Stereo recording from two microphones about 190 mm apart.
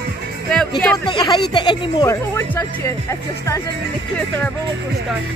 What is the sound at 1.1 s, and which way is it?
Speech, 20° left (ahead or behind).